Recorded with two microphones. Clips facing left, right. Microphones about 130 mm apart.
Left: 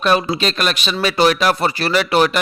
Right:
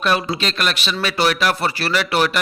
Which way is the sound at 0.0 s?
25° left (ahead or behind).